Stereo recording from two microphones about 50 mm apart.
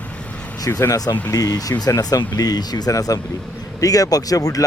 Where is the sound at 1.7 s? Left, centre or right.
Left.